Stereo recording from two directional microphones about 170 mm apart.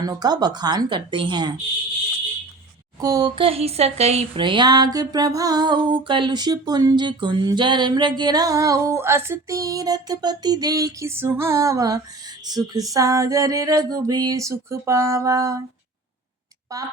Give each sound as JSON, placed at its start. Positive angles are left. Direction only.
{"t": 0.0, "sound": "speech", "side_deg": -25}
{"t": 3.0, "sound": "speech", "side_deg": -20}
{"t": 16.7, "sound": "a woman's voice", "side_deg": -20}